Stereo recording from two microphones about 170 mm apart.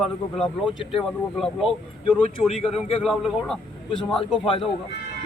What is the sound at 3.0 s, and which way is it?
A man's voice, centre (ahead or behind).